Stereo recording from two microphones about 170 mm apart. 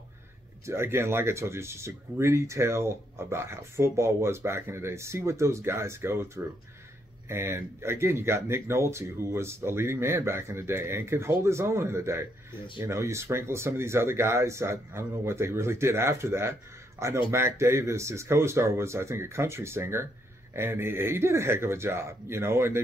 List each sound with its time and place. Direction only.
0.7 s speech: 15° right (ahead or behind)